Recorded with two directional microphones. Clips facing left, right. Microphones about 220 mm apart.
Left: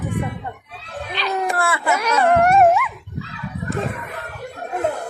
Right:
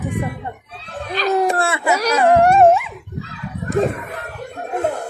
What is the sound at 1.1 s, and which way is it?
Speech, 40° right (ahead or behind).